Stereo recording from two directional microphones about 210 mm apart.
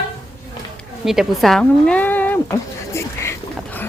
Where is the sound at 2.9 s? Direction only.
15° left (ahead or behind).